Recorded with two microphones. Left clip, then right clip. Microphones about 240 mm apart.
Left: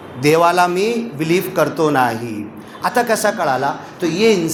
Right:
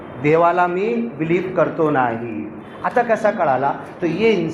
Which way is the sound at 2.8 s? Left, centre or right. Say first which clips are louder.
Left 1 dB; left.